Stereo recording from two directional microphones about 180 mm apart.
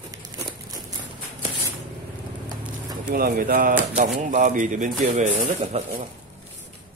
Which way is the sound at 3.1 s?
50° right (ahead or behind).